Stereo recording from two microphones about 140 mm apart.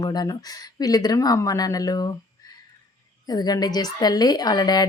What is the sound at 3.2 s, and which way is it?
A woman's voice, 30° left (ahead or behind).